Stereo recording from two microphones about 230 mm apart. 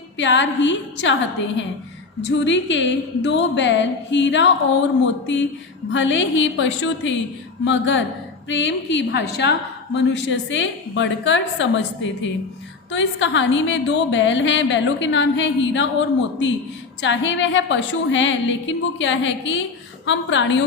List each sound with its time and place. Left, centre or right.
0.2 s a woman's voice: left
2.3 s a woman's voice: left
5.9 s a woman's voice: left